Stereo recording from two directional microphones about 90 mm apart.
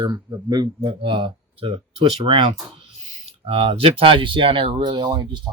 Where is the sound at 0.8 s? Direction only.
60° right (ahead or behind).